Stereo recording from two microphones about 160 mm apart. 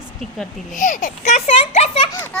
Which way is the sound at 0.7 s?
55° left (ahead or behind).